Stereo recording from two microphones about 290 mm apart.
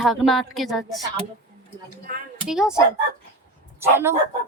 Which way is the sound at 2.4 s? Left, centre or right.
Centre.